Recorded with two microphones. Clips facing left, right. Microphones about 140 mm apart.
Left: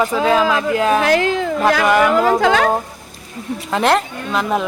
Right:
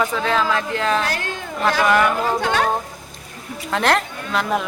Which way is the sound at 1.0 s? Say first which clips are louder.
Left 9 dB; 90° left.